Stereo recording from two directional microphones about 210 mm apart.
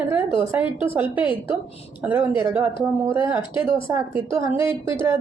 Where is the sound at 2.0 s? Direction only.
10° right (ahead or behind).